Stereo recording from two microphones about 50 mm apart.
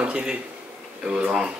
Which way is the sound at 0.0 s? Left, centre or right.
Right.